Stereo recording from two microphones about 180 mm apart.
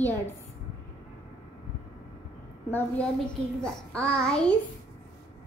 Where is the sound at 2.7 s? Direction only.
10° left (ahead or behind).